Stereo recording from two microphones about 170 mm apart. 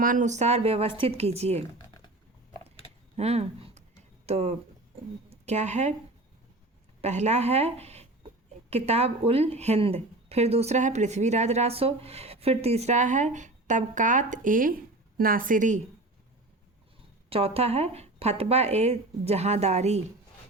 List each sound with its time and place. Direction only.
0.0 s speech: 50° right (ahead or behind)
3.2 s a sound: 40° right (ahead or behind)
5.3 s speech: 40° right (ahead or behind)
7.0 s a woman's voice: 40° right (ahead or behind)
17.2 s speech: 35° right (ahead or behind)